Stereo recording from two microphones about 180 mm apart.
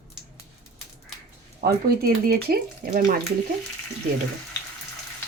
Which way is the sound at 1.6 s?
60° right (ahead or behind).